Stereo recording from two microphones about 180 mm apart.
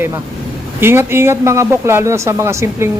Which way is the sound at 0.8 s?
15° right (ahead or behind).